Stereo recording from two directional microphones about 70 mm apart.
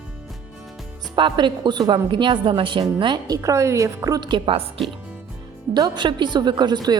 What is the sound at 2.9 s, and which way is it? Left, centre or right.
Speech, right.